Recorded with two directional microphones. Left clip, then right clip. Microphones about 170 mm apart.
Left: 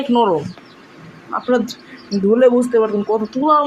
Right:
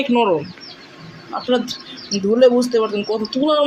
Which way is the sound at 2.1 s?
25° left (ahead or behind).